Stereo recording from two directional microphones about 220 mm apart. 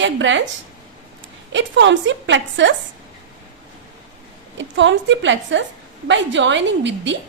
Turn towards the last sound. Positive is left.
turn(degrees=-55)  # may be behind; listen again after turning